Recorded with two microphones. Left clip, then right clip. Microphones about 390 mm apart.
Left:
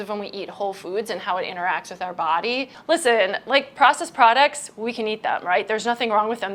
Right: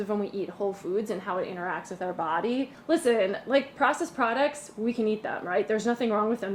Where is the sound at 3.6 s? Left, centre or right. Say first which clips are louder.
Left 9 dB; left.